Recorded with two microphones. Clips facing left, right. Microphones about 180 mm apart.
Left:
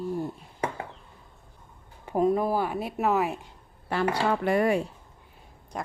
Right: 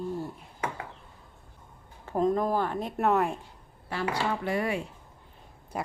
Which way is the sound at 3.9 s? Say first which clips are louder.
Left 4 dB; 60° left (ahead or behind).